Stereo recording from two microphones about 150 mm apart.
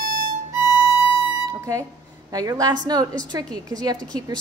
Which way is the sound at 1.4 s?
20° right (ahead or behind).